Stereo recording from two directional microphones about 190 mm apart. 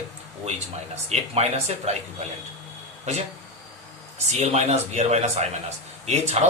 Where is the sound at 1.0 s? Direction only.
35° right (ahead or behind).